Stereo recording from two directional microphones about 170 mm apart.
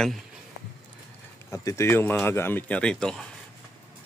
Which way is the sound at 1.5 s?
20° left (ahead or behind).